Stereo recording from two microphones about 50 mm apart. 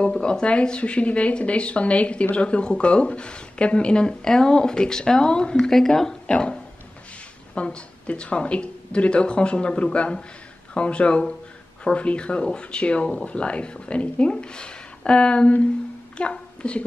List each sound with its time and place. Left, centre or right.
0.0 s a woman's voice: centre